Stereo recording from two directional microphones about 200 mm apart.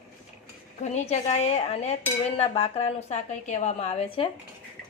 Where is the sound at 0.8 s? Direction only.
35° left (ahead or behind).